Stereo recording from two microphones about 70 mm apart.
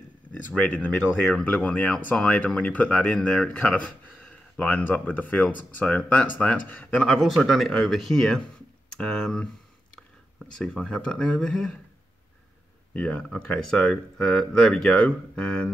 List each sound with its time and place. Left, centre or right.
0.3 s speech: centre
7.2 s speech: centre
12.9 s speech: centre